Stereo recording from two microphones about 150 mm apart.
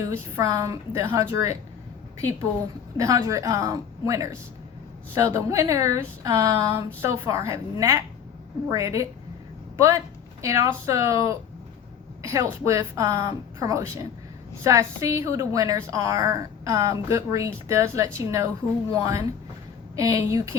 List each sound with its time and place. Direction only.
0.0 s a woman's voice: 20° right (ahead or behind)
3.0 s a woman's voice: 20° right (ahead or behind)